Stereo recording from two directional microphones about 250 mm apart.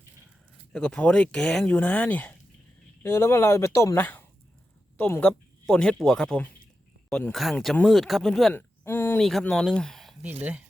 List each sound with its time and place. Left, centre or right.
0.7 s speech: centre